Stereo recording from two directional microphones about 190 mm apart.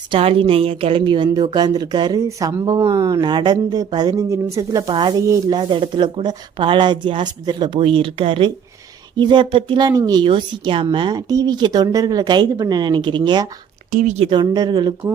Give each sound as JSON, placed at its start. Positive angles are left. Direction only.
{"t": 0.1, "sound": "a woman's voice", "side_deg": -30}
{"t": 13.9, "sound": "a woman's voice", "side_deg": -40}
{"t": 14.3, "sound": "a woman's voice", "side_deg": -20}